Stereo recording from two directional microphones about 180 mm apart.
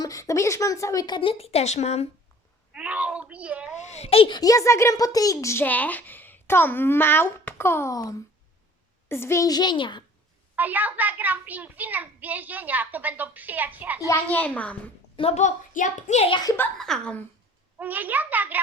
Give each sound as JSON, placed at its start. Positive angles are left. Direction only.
{"t": 0.0, "sound": "a woman's voice", "side_deg": 20}
{"t": 2.7, "sound": "a child's voice", "side_deg": -5}
{"t": 3.8, "sound": "a child's voice", "side_deg": 40}
{"t": 10.5, "sound": "a child's voice", "side_deg": -10}
{"t": 14.1, "sound": "a child's voice", "side_deg": 10}
{"t": 15.1, "sound": "a child's voice", "side_deg": 30}
{"t": 16.4, "sound": "a woman's voice", "side_deg": 20}
{"t": 16.7, "sound": "a woman's voice", "side_deg": 0}
{"t": 17.7, "sound": "a child's voice", "side_deg": -10}